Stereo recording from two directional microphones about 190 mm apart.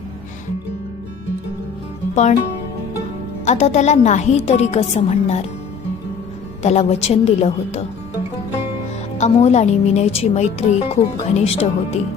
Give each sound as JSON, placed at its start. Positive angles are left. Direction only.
{"t": 2.1, "sound": "music", "side_deg": 35}
{"t": 3.4, "sound": "a woman's voice", "side_deg": 35}
{"t": 6.6, "sound": "a woman's voice", "side_deg": 35}
{"t": 9.1, "sound": "a woman's voice", "side_deg": 35}